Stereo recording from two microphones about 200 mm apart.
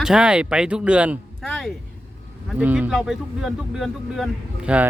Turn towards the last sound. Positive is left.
turn(degrees=-5)  # may be behind; listen again after turning